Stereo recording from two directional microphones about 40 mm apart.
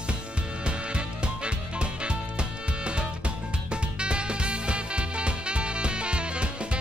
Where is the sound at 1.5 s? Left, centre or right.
Right.